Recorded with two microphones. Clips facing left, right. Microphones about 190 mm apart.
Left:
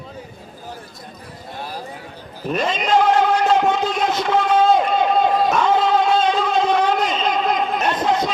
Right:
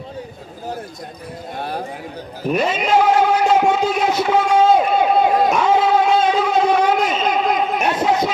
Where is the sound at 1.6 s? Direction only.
60° right (ahead or behind).